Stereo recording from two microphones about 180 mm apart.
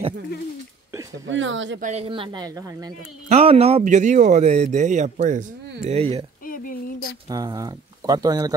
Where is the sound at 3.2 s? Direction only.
35° right (ahead or behind).